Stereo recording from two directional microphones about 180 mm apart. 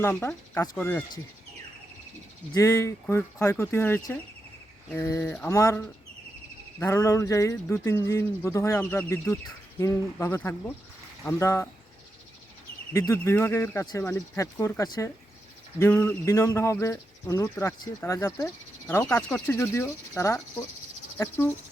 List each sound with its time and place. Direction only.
0.0 s speech: 10° left (ahead or behind)
2.5 s speech: 20° left (ahead or behind)
12.9 s speech: 15° left (ahead or behind)